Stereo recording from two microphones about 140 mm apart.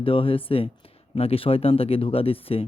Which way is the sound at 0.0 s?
40° left (ahead or behind).